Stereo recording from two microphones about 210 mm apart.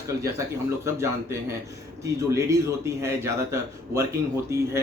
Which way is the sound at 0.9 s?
15° right (ahead or behind).